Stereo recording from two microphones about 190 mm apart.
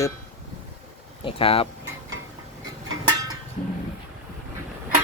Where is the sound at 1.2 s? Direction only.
30° left (ahead or behind).